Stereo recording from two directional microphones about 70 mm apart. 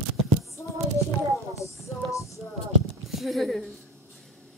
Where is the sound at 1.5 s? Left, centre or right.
Left.